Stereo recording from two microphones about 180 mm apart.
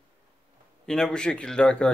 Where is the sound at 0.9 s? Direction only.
5° left (ahead or behind).